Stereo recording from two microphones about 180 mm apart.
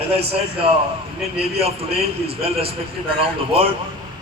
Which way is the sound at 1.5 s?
35° right (ahead or behind).